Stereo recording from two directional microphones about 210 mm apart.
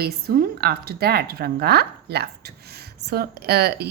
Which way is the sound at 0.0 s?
45° right (ahead or behind).